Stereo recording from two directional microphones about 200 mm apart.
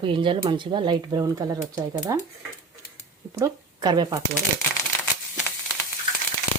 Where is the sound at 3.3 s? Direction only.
15° right (ahead or behind).